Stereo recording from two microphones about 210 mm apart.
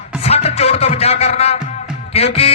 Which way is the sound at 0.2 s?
30° left (ahead or behind).